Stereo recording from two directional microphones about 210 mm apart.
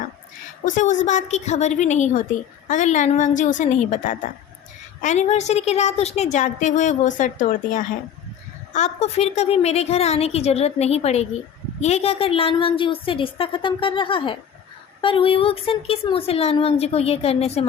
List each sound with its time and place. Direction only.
0.6 s a woman's voice: 35° left (ahead or behind)